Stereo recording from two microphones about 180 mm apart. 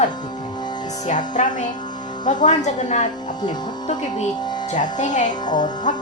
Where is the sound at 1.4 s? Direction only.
40° left (ahead or behind).